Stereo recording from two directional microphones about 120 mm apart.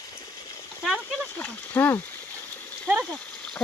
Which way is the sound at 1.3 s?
15° left (ahead or behind).